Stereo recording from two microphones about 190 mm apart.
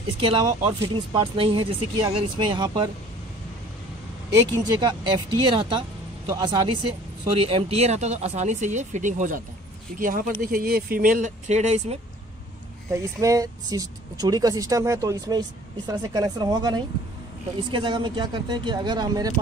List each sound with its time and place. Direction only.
0.2 s speech: 30° right (ahead or behind)
4.7 s speech: 25° right (ahead or behind)
12.9 s speech: 15° right (ahead or behind)